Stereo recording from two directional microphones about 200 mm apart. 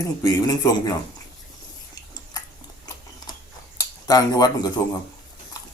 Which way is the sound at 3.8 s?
15° left (ahead or behind).